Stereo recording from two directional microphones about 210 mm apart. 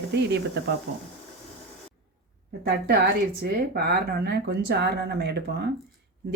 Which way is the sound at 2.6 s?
50° right (ahead or behind).